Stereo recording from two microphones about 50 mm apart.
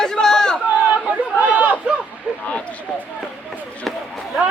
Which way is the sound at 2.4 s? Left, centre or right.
Left.